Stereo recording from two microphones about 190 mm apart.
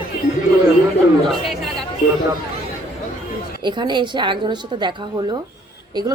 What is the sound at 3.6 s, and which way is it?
A woman's voice, 25° right (ahead or behind).